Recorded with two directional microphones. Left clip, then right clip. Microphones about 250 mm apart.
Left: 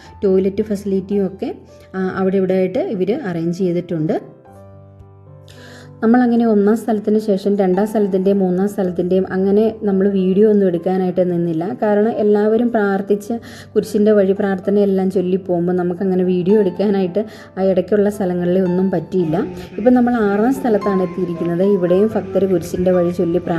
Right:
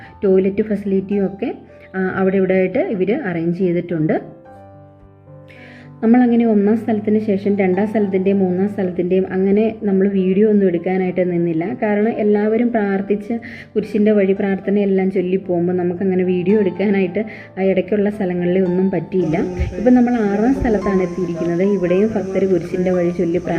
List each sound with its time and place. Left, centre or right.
0.2 s speech: left
6.0 s a woman's voice: centre